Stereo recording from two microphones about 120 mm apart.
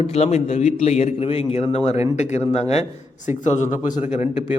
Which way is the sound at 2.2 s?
75° left (ahead or behind).